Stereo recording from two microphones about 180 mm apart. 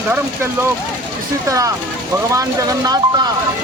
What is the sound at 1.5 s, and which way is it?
Speech, 20° right (ahead or behind).